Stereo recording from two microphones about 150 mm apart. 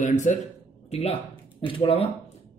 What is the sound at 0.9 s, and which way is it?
Speech, 40° left (ahead or behind).